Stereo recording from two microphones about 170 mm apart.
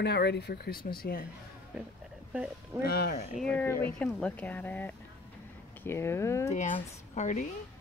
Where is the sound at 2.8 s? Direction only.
65° left (ahead or behind).